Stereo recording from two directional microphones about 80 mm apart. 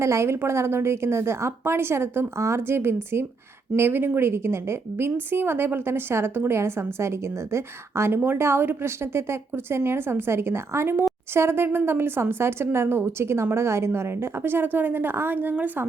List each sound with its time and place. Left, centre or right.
0.0 s a woman's voice: right